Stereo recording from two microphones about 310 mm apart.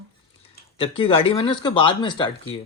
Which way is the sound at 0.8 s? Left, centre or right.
Centre.